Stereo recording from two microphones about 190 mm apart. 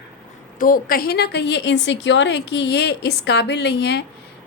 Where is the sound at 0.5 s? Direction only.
45° left (ahead or behind).